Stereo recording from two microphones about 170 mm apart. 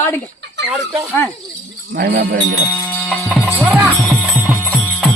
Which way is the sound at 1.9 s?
70° right (ahead or behind).